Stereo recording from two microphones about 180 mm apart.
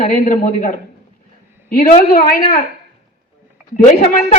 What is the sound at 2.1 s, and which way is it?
Speech, 60° left (ahead or behind).